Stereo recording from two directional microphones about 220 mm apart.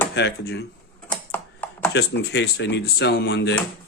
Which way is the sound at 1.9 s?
50° left (ahead or behind).